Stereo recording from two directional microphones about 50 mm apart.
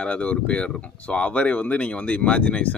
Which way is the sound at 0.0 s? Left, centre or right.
Left.